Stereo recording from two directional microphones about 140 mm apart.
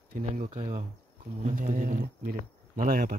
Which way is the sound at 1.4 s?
70° right (ahead or behind).